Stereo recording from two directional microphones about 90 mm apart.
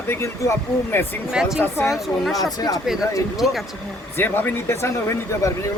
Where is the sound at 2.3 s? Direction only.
45° left (ahead or behind).